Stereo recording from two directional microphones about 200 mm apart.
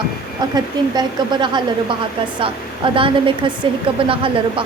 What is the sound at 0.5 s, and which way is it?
A woman's voice, 20° right (ahead or behind).